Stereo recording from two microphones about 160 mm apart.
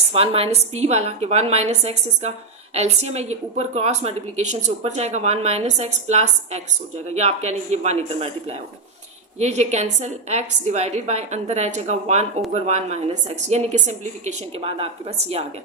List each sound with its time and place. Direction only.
0.1 s a woman's voice: 40° right (ahead or behind)